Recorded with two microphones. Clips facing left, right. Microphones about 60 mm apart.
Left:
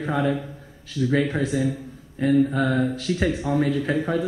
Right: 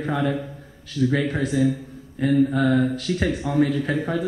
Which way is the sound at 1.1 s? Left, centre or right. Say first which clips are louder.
Left 5 dB; left.